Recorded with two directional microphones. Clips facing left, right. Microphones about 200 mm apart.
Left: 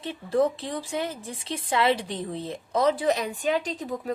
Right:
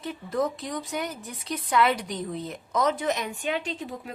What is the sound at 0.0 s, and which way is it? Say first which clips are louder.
Speech: left 4 dB; 30° left (ahead or behind).